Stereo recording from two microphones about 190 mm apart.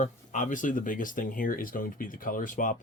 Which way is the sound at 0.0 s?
40° left (ahead or behind).